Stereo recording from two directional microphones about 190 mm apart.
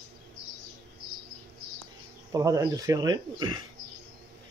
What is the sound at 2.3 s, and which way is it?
Speech, 15° right (ahead or behind).